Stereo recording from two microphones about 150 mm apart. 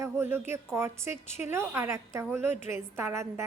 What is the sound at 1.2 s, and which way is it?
Speech, 50° left (ahead or behind).